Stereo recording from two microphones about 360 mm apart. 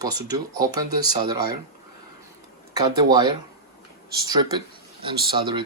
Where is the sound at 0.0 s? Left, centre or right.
Centre.